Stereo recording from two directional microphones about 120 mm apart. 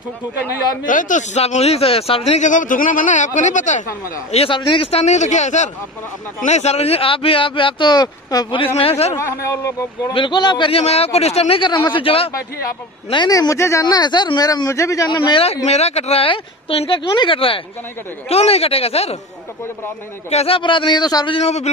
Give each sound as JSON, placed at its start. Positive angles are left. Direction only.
{"t": 0.8, "sound": "speech", "side_deg": 90}
{"t": 4.5, "sound": "speech", "side_deg": 45}
{"t": 4.9, "sound": "speech", "side_deg": 70}
{"t": 8.7, "sound": "speech", "side_deg": 55}
{"t": 9.1, "sound": "a man's voice", "side_deg": 25}
{"t": 10.1, "sound": "speech", "side_deg": 40}
{"t": 10.7, "sound": "speech", "side_deg": 60}
{"t": 13.1, "sound": "speech", "side_deg": 35}
{"t": 15.0, "sound": "speech", "side_deg": 40}
{"t": 15.4, "sound": "speech", "side_deg": 60}
{"t": 20.2, "sound": "speech", "side_deg": 55}
{"t": 21.4, "sound": "speech", "side_deg": 60}